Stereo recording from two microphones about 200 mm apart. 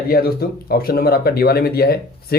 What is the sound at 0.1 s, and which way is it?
Speech, 50° left (ahead or behind).